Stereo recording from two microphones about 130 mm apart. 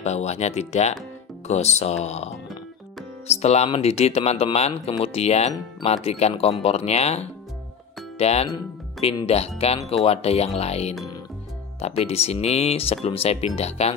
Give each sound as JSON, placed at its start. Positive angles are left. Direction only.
{"t": 0.0, "sound": "speech", "side_deg": 60}
{"t": 3.3, "sound": "speech", "side_deg": 55}